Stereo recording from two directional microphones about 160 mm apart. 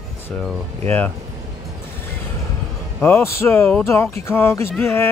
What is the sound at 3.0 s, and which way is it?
Speech, 15° left (ahead or behind).